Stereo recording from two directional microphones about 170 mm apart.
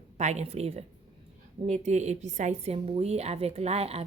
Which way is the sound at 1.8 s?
40° right (ahead or behind).